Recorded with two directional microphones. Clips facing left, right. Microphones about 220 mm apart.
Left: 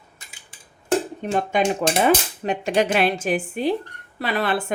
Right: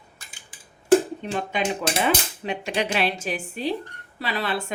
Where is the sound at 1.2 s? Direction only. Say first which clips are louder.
Left 5 dB; 45° left (ahead or behind).